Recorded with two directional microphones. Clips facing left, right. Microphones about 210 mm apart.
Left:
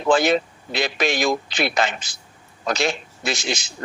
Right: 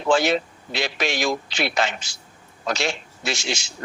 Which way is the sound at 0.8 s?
55° left (ahead or behind).